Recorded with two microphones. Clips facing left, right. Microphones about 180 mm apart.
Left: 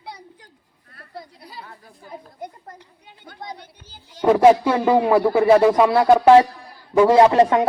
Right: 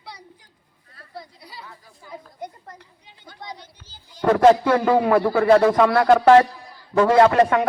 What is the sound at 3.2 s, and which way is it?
Children playing, 55° left (ahead or behind).